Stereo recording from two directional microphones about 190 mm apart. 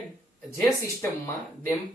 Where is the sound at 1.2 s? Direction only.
15° left (ahead or behind).